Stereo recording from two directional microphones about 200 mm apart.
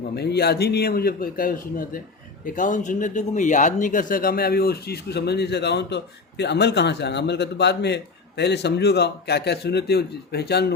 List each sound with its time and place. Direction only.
0.1 s a man's voice: 55° left (ahead or behind)